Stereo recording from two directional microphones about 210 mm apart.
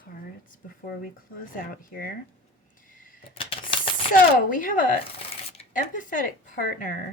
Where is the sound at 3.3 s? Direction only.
25° left (ahead or behind).